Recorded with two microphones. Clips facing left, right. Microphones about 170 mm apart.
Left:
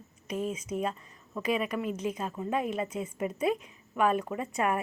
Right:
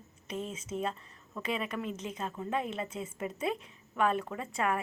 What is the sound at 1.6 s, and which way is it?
Speech, 15° left (ahead or behind).